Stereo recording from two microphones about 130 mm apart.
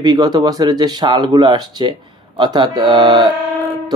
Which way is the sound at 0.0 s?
30° right (ahead or behind).